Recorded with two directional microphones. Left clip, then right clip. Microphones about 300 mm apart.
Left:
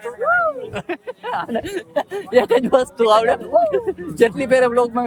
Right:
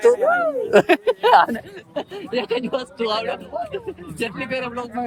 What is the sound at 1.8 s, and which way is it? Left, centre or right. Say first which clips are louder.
Speech: left 6 dB; centre.